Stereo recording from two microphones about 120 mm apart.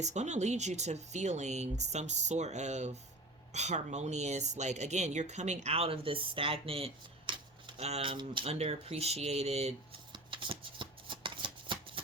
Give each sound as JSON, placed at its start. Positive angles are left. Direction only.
{"t": 0.0, "sound": "speech", "side_deg": -70}
{"t": 7.8, "sound": "speech", "side_deg": -60}
{"t": 8.1, "sound": "speech", "side_deg": -45}
{"t": 8.4, "sound": "speech", "side_deg": -60}
{"t": 10.1, "sound": "shuffling cards", "side_deg": -45}